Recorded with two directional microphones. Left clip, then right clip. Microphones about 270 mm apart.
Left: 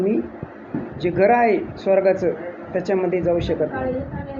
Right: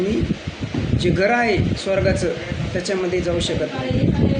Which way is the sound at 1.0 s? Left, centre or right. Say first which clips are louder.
Left 2 dB; centre.